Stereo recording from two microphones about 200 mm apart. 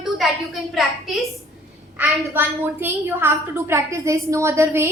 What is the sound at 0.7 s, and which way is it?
Speech, centre (ahead or behind).